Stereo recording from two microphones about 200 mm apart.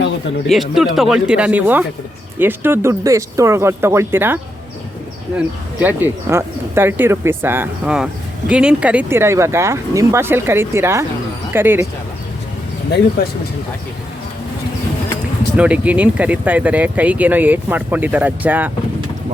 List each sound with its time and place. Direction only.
0.4 s speech: centre (ahead or behind)
5.8 s speech: 10° right (ahead or behind)
13.2 s speech: 50° left (ahead or behind)
15.5 s speech: 5° right (ahead or behind)